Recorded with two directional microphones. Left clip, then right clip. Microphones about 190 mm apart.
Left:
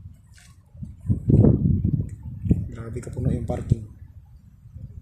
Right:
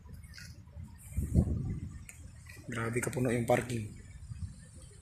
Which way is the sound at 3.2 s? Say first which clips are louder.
Right 1 dB; 5° left (ahead or behind).